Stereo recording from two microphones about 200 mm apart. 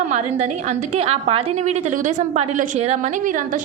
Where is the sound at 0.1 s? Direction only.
35° right (ahead or behind).